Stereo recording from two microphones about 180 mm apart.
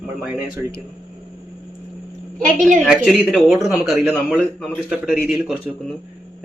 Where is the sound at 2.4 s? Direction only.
45° right (ahead or behind).